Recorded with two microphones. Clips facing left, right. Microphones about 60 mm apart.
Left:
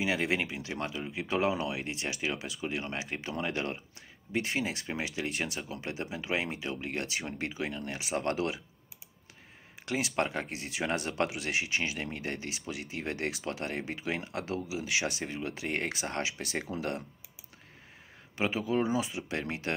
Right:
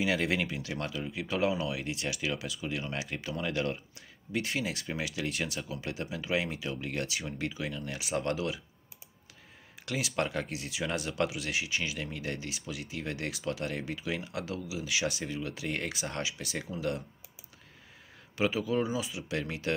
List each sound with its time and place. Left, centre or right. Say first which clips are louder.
0.0 s speech: right 1 dB; centre; by 8.5 s left
10.1 s speech: even; left
12.0 s speech: even; left
14.8 s speech: right 2 dB; left
18.3 s speech: right 1 dB; left
18.8 s speech: left 2 dB; left